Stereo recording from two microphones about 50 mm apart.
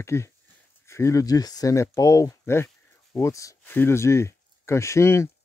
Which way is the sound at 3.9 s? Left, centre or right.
Left.